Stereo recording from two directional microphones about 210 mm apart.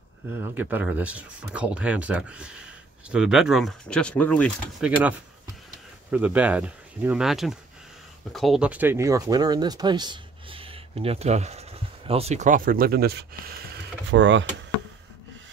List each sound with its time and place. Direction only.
0.3 s speech: 10° right (ahead or behind); by 4.8 s 5° left (ahead or behind)
4.8 s speech: 5° right (ahead or behind); by 13.2 s 50° right (ahead or behind)
14.0 s speech: 60° right (ahead or behind)